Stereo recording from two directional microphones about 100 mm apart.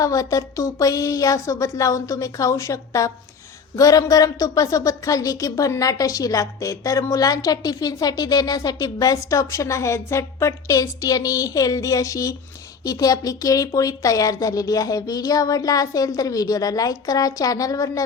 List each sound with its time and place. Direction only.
0.0 s a woman's voice: 35° left (ahead or behind)